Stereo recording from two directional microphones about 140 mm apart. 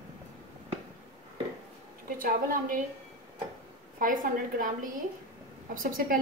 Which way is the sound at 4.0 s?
75° right (ahead or behind).